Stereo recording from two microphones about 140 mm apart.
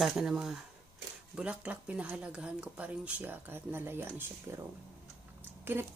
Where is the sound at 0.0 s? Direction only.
Centre (ahead or behind).